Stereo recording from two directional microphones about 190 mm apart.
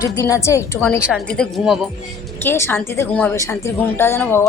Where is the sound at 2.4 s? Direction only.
10° left (ahead or behind).